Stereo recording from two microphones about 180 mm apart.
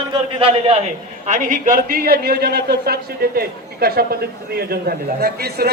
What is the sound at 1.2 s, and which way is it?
A man's voice, 45° right (ahead or behind).